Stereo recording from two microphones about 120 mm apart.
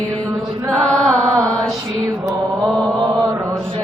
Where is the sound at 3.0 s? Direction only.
25° right (ahead or behind).